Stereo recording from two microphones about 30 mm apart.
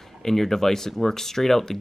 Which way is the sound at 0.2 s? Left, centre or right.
Centre.